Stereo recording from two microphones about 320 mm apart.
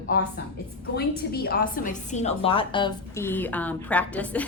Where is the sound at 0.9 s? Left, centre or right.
Left.